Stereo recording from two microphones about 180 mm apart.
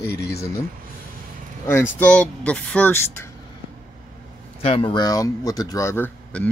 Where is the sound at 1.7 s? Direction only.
10° left (ahead or behind).